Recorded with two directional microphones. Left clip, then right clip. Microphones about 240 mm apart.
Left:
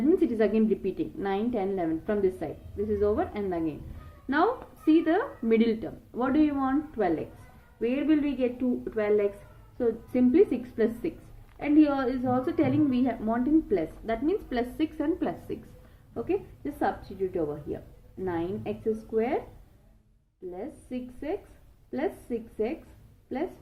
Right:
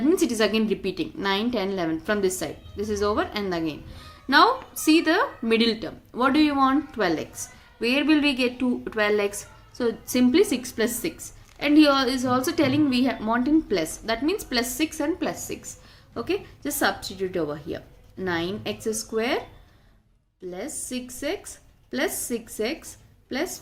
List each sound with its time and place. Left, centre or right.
0.1 s a woman's voice: right
4.9 s a woman's voice: centre
16.1 s a woman's voice: right
20.5 s a woman's voice: right